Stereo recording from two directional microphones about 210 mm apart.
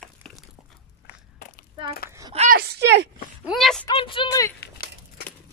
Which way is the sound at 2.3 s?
30° right (ahead or behind).